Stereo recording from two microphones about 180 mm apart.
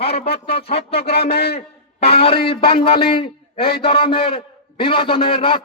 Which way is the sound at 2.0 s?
30° left (ahead or behind).